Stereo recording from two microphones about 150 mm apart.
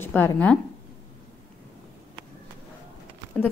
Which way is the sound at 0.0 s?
10° left (ahead or behind).